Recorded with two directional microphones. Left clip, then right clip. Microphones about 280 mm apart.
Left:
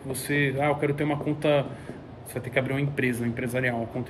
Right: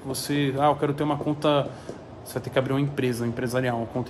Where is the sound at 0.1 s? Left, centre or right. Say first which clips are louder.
Even; centre.